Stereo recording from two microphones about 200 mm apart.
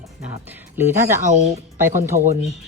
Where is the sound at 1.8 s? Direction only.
10° right (ahead or behind).